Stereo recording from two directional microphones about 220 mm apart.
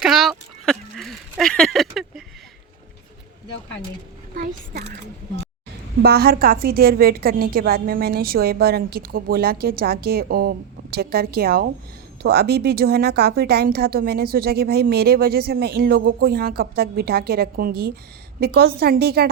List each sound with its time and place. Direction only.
0.0 s a sound: centre (ahead or behind)
4.4 s a woman's voice: 40° right (ahead or behind)
6.0 s a woman's voice: 45° right (ahead or behind)